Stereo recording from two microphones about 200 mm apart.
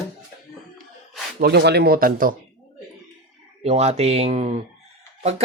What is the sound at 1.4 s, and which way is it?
Speech, 55° right (ahead or behind).